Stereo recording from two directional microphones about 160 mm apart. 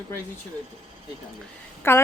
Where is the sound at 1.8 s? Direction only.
15° left (ahead or behind).